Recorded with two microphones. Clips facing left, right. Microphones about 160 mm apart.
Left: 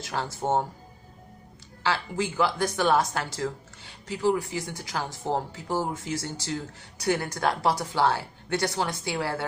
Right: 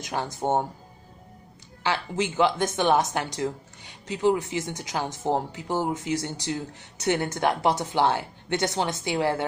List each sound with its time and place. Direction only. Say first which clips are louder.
0.0 s speech: right 2 dB; 15° right (ahead or behind)
1.8 s speech: right 1 dB; 20° right (ahead or behind)